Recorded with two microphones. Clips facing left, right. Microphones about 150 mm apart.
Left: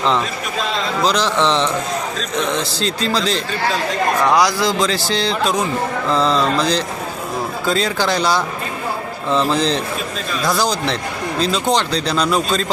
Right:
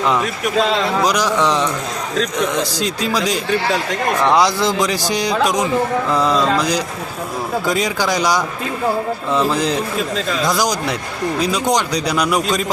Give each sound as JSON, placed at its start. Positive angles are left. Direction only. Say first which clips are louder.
{"t": 1.0, "sound": "speech", "louder": "left 3 dB", "side_deg": -10}
{"t": 2.8, "sound": "speech", "louder": "left 2 dB", "side_deg": -10}